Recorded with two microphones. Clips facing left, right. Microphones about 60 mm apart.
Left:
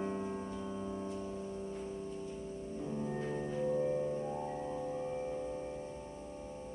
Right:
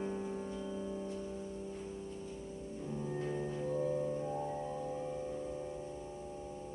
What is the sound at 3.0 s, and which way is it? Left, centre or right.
Organ, centre.